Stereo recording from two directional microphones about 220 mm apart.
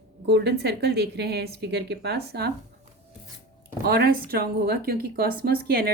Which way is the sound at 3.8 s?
45° right (ahead or behind).